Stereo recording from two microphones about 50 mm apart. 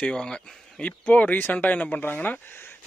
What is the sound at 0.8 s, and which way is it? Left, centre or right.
Speech, left.